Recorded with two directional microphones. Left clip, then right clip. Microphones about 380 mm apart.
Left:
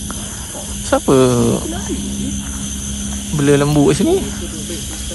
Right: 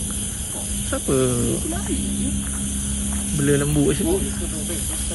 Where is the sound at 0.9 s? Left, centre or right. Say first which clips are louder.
Left 10 dB; left.